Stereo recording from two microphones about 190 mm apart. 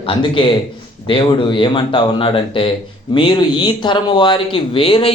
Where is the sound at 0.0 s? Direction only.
25° left (ahead or behind).